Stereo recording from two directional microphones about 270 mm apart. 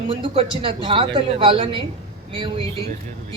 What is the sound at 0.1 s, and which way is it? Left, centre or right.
A woman's voice, centre.